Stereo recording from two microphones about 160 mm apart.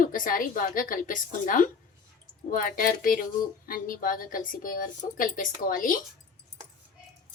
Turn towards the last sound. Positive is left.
turn(degrees=60)  # may be behind; listen again after turning